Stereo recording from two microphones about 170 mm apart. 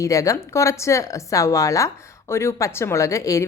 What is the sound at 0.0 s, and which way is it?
A woman's voice, 20° left (ahead or behind).